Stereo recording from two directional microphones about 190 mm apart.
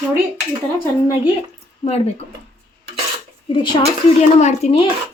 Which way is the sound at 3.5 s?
25° left (ahead or behind).